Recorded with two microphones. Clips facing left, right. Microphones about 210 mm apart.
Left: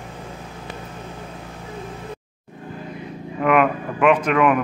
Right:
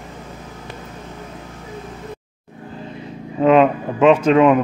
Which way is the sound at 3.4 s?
25° right (ahead or behind).